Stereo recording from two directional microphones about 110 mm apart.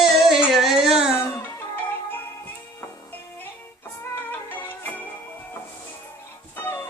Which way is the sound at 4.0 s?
20° left (ahead or behind).